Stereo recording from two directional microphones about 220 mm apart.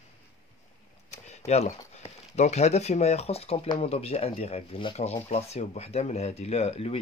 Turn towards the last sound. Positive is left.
turn(degrees=25)  # may be behind; listen again after turning